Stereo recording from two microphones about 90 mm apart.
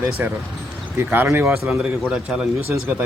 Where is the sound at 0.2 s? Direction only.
20° right (ahead or behind).